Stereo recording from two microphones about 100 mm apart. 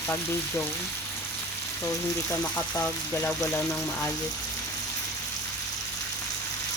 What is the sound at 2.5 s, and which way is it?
Frying, 15° left (ahead or behind).